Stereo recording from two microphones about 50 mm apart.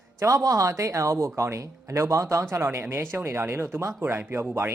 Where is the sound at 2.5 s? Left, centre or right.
Right.